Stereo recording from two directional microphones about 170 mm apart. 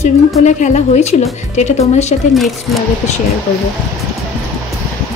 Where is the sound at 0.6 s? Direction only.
45° left (ahead or behind).